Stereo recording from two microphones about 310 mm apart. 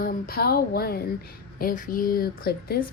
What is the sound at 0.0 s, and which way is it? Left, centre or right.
A woman's voice, left.